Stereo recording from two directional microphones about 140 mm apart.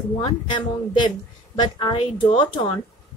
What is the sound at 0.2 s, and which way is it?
Speech, 35° left (ahead or behind).